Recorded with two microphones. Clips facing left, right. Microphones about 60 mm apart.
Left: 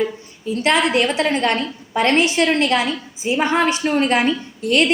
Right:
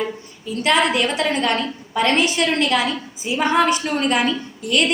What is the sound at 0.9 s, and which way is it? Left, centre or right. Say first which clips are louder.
A woman's voice: left 2 dB; left.